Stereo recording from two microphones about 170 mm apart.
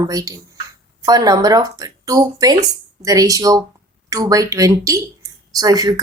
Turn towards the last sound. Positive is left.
turn(degrees=-25)  # may be behind; listen again after turning